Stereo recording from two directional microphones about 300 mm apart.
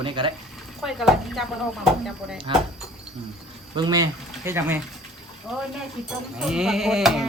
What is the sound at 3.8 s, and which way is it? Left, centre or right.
Speech, centre.